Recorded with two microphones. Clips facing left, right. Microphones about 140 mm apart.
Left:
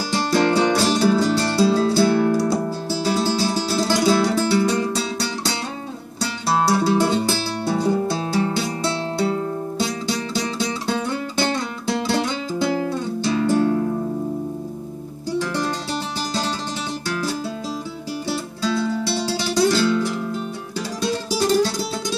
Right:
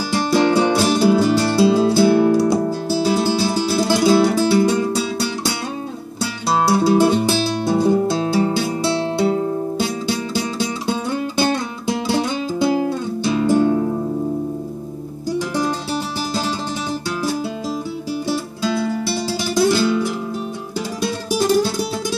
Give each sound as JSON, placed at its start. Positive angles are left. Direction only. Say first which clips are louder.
{"t": 0.1, "sound": "music", "louder": "right 3 dB", "side_deg": -10}
{"t": 6.6, "sound": "music", "louder": "right 4 dB", "side_deg": -15}
{"t": 12.1, "sound": "music", "louder": "right 2 dB", "side_deg": -15}
{"t": 18.6, "sound": "guitar", "louder": "left 1 dB", "side_deg": -15}
{"t": 21.0, "sound": "music", "louder": "right 1 dB", "side_deg": -10}